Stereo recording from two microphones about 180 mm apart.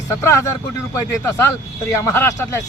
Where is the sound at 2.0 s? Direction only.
15° left (ahead or behind).